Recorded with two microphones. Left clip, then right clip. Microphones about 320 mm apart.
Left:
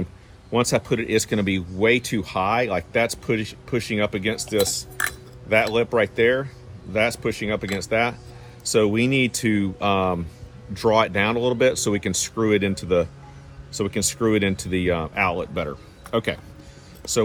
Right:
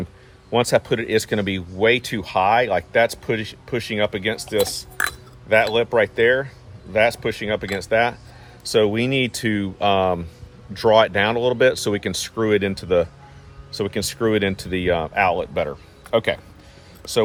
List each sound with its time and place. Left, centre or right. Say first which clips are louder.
0.5 s speech: right 3 dB; right